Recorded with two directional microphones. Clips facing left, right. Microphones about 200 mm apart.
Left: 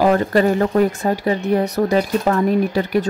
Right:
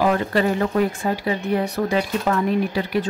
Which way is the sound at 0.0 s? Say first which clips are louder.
Left 4 dB; 45° left (ahead or behind).